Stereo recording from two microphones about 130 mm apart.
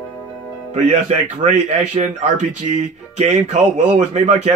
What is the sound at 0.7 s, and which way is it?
Speech, 65° right (ahead or behind).